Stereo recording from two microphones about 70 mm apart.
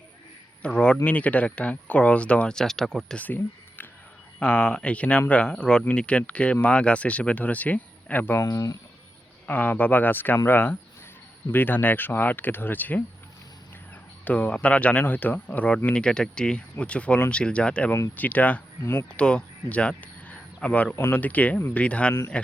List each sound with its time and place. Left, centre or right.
0.6 s speech: centre
3.2 s speech: left
8.4 s speech: left
9.5 s speech: left
14.3 s speech: left
18.8 s speech: left
19.1 s speech: centre